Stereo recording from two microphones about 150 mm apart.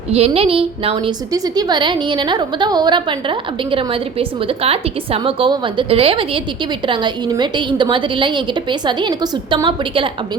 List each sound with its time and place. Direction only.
0.1 s a woman's voice: 40° right (ahead or behind)
1.3 s a woman's voice: 25° right (ahead or behind)